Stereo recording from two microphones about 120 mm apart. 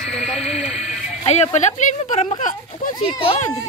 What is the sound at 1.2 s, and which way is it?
Speech, 65° left (ahead or behind).